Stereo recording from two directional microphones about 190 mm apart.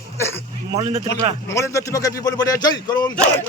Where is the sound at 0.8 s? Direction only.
30° right (ahead or behind).